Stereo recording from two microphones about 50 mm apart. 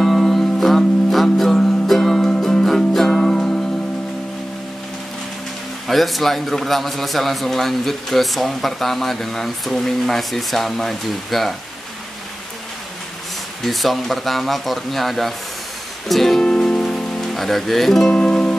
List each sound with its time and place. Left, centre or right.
0.0 s music: centre
5.9 s a man's voice: centre
13.6 s a man's voice: centre
16.1 s music: centre
16.4 s music: centre
18.1 s music: centre